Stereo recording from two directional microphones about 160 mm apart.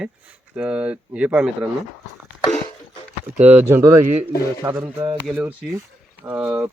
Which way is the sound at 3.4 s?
15° right (ahead or behind).